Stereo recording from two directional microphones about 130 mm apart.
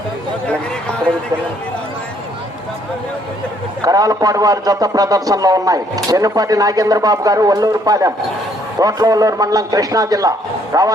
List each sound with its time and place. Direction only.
3.8 s a man's voice: 30° right (ahead or behind)